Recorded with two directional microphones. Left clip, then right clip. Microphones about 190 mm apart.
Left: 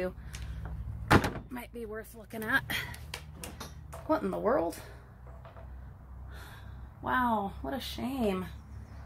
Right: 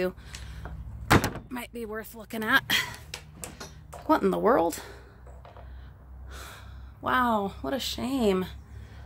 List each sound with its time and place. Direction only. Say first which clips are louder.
1.0 s door: right 3 dB; 55° right (ahead or behind)
1.5 s speech: right 5 dB; 40° right (ahead or behind)
4.1 s speech: right 6 dB; 45° right (ahead or behind)
7.0 s speech: right 4 dB; 50° right (ahead or behind)